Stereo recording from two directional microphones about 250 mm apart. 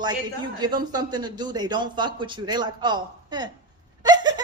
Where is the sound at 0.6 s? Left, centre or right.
Centre.